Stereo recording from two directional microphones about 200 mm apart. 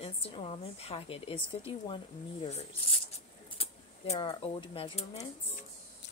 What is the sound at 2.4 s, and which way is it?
Speech, 30° left (ahead or behind).